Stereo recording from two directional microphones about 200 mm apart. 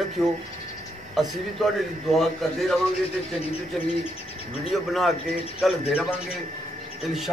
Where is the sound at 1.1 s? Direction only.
Centre (ahead or behind).